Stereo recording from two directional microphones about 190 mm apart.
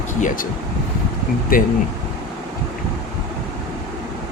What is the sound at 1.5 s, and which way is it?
Speech, 50° left (ahead or behind).